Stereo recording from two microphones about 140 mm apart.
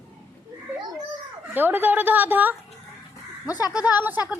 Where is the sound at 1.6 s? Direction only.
15° right (ahead or behind).